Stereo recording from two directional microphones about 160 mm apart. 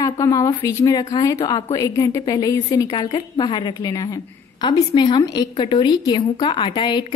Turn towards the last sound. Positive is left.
turn(degrees=30)  # may be behind; listen again after turning